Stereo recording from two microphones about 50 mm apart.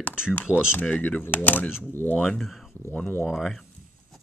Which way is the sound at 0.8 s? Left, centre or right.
Left.